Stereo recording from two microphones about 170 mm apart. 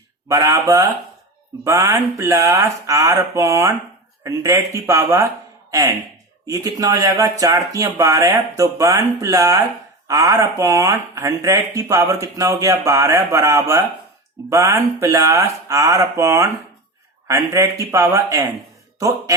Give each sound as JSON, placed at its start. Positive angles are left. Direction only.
{"t": 0.3, "sound": "speech", "side_deg": -20}
{"t": 6.4, "sound": "speech", "side_deg": -20}